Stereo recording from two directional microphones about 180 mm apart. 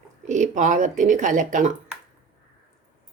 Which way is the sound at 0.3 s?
45° right (ahead or behind).